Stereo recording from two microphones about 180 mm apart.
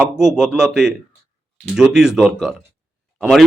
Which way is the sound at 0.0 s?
Centre (ahead or behind).